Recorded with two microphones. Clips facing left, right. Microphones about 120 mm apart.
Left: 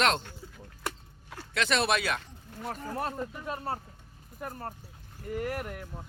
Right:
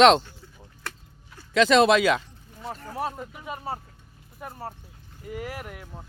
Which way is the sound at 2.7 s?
Centre (ahead or behind).